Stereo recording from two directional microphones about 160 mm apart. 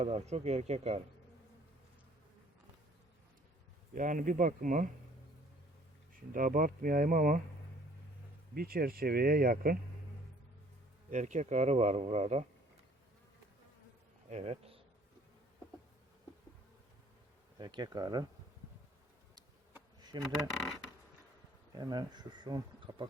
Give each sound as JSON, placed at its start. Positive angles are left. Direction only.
{"t": 0.0, "sound": "speech", "side_deg": -40}
{"t": 3.9, "sound": "speech", "side_deg": -55}
{"t": 6.3, "sound": "speech", "side_deg": -60}
{"t": 8.5, "sound": "speech", "side_deg": -65}
{"t": 11.1, "sound": "a man's voice", "side_deg": -50}
{"t": 14.3, "sound": "a man's voice", "side_deg": -45}
{"t": 17.6, "sound": "speech", "side_deg": -25}
{"t": 20.0, "sound": "a sound", "side_deg": -25}
{"t": 21.8, "sound": "speech", "side_deg": -25}